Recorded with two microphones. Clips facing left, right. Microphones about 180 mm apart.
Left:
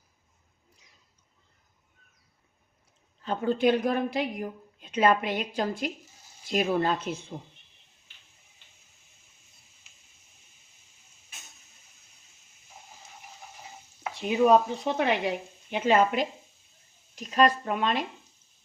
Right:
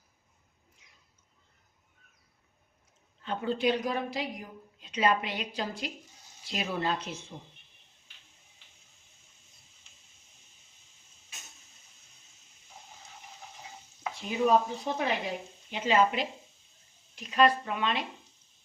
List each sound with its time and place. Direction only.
3.2 s a woman's voice: 50° left (ahead or behind)
14.2 s stir: 65° left (ahead or behind)
14.9 s a woman's voice: 70° left (ahead or behind); by 18.0 s 45° left (ahead or behind)